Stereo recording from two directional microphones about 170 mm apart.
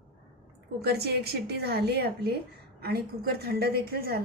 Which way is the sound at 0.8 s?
70° right (ahead or behind).